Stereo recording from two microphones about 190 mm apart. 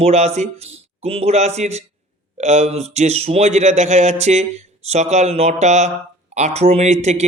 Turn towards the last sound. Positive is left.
turn(degrees=-35)  # may be behind; listen again after turning